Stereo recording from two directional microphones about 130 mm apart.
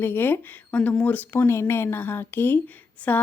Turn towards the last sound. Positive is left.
turn(degrees=15)  # may be behind; listen again after turning